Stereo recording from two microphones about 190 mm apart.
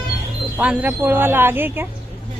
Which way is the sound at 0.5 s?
10° right (ahead or behind).